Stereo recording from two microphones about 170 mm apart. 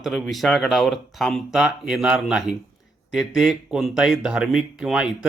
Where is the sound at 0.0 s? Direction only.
Centre (ahead or behind).